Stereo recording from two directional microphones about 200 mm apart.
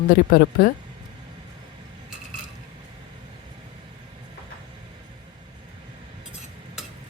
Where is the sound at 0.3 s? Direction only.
45° left (ahead or behind).